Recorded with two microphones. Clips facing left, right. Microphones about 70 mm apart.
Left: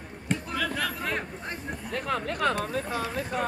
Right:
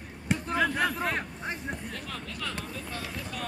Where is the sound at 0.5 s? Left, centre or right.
Right.